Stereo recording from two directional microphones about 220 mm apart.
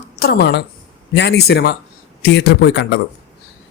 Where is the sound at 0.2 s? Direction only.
45° left (ahead or behind).